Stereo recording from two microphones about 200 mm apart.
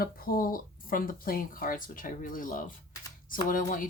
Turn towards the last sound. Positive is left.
turn(degrees=40)  # may be behind; listen again after turning